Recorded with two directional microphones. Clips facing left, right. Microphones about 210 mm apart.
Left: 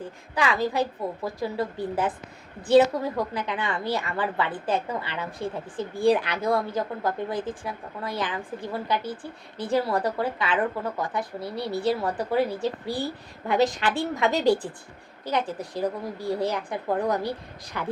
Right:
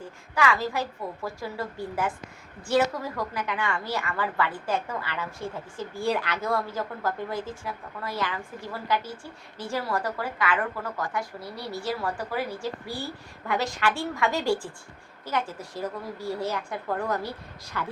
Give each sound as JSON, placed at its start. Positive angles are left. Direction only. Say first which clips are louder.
{"t": 0.3, "sound": "a woman's voice", "louder": "left 2 dB", "side_deg": 20}
{"t": 11.2, "sound": "speech", "louder": "left 5 dB", "side_deg": 60}
{"t": 11.9, "sound": "a woman's voice", "louder": "left 5 dB", "side_deg": 20}